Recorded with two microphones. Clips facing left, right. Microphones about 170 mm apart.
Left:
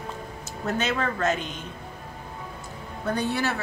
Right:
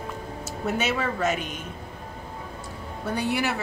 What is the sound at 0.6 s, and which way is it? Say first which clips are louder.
Speech: even; 5° right (ahead or behind).